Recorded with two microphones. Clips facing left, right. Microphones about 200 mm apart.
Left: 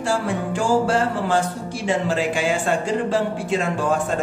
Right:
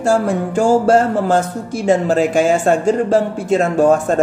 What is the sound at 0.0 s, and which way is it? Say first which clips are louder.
Speech: right 7 dB; 45° right (ahead or behind).